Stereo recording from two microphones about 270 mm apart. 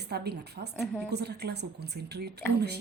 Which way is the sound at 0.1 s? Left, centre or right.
Right.